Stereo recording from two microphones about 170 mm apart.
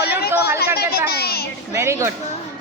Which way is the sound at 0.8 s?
65° left (ahead or behind).